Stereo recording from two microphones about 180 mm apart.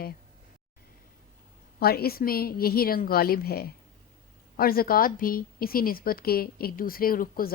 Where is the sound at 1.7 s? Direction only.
60° left (ahead or behind).